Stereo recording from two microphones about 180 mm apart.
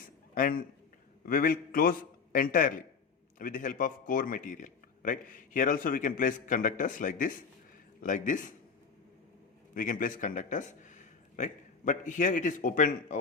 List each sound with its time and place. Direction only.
0.3 s a man's voice: 50° left (ahead or behind)
9.7 s a man's voice: 50° left (ahead or behind)